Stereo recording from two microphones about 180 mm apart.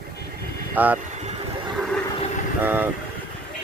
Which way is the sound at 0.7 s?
10° right (ahead or behind).